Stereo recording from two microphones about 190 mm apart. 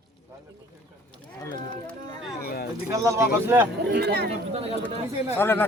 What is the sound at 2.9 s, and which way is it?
Bird, 15° right (ahead or behind).